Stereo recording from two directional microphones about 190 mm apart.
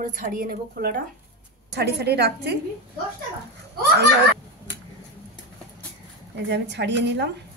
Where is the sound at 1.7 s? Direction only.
60° right (ahead or behind).